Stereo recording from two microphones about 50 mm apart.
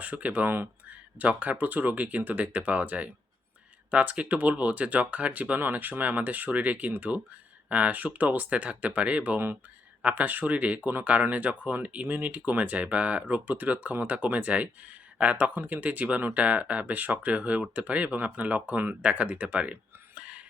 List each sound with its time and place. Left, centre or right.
0.0 s speech: right
20.1 s whispering: right